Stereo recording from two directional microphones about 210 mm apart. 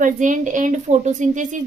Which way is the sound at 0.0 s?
35° right (ahead or behind).